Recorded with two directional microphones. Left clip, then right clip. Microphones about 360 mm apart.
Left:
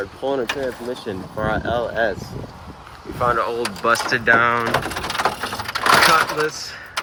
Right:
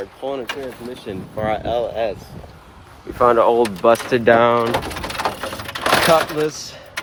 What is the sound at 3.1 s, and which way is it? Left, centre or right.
Speech, right.